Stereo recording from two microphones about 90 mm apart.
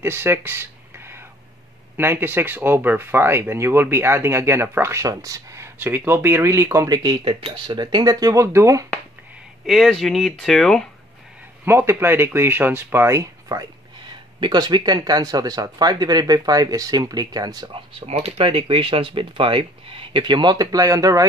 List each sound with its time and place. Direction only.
0.0 s a sound: 25° right (ahead or behind)
2.0 s speech: 25° right (ahead or behind)
6.9 s speech: 50° right (ahead or behind)
7.2 s speech: 80° right; by 8.8 s 35° right (ahead or behind)
9.7 s speech: centre (ahead or behind)
11.6 s speech: 30° right (ahead or behind)
14.0 s speech: 55° right (ahead or behind)
18.1 s speech: 80° right; by 21.3 s 40° right (ahead or behind)